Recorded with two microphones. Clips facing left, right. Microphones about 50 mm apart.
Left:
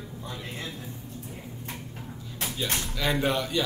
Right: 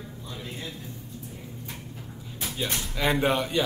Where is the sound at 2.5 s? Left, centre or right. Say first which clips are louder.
Right 1 dB; right.